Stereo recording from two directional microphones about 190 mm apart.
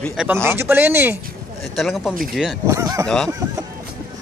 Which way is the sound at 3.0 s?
Centre (ahead or behind).